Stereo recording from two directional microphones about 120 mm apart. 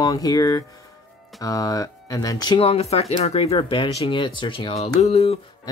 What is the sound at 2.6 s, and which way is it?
Speech, 60° left (ahead or behind).